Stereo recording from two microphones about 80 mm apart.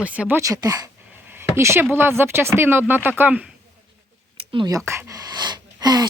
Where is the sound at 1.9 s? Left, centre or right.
Right.